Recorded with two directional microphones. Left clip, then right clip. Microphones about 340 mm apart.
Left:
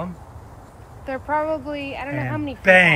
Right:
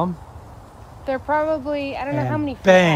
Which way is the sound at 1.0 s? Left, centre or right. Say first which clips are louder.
Right 3 dB; right.